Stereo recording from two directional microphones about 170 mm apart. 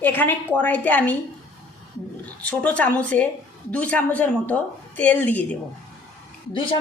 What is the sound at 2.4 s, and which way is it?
A woman's voice, 10° left (ahead or behind).